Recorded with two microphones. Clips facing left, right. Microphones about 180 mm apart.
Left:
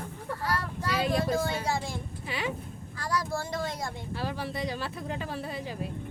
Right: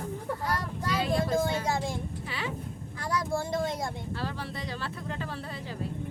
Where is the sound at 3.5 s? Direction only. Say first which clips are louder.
Right 3 dB; 25° right (ahead or behind).